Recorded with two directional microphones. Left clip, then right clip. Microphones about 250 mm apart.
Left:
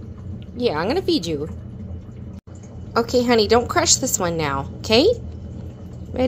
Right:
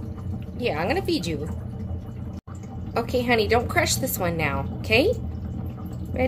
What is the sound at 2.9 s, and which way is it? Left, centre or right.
A woman's voice, centre.